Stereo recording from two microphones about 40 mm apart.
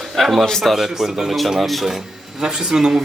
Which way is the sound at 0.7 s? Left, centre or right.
Centre.